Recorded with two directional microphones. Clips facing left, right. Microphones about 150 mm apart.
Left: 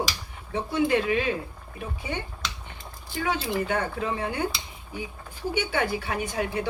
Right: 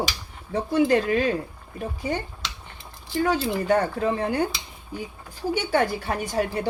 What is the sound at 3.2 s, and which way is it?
A woman's voice, 40° right (ahead or behind).